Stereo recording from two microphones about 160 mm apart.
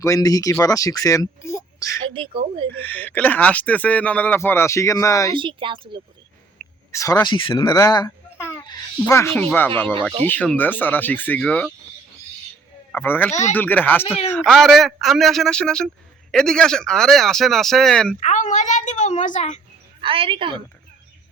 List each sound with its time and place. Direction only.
0.0 s speech: 20° left (ahead or behind)
2.1 s a woman's voice: 35° right (ahead or behind)
2.8 s speech: 10° left (ahead or behind)
5.3 s a woman's voice: 30° right (ahead or behind)
6.6 s a sound: 5° left (ahead or behind)
6.9 s speech: 20° left (ahead or behind)
7.3 s speech: 30° left (ahead or behind)
7.5 s speech: 20° left (ahead or behind)
12.9 s speech: 10° left (ahead or behind)
18.2 s a child's voice: 50° left (ahead or behind)
20.0 s a woman's voice: 35° right (ahead or behind)